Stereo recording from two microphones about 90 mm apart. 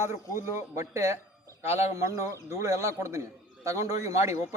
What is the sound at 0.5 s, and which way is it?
Speech, 35° right (ahead or behind).